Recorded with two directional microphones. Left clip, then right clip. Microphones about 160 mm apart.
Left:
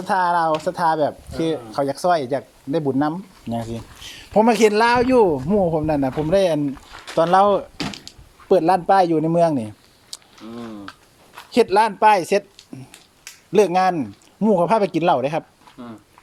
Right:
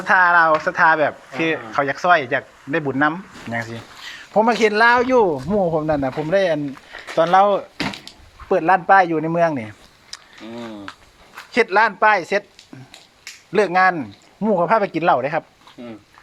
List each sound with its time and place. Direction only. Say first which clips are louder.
0.0 s speech: right 5 dB; 30° left (ahead or behind)
4.0 s speech: even; 75° left (ahead or behind); by 5.3 s 50° left (ahead or behind)
5.3 s speech: even; 35° left (ahead or behind); by 9.5 s 65° left (ahead or behind)
11.5 s speech: even; 65° left (ahead or behind)